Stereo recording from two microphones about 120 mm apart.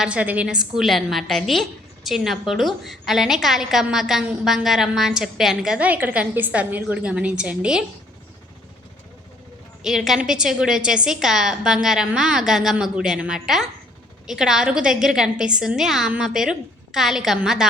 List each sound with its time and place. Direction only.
0.0 s a woman's voice: 10° right (ahead or behind)
9.8 s a woman's voice: centre (ahead or behind)